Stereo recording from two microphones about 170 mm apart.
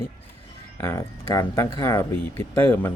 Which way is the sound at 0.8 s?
15° left (ahead or behind).